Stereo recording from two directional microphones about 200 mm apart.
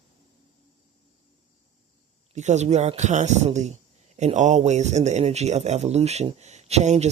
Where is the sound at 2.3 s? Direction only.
35° right (ahead or behind).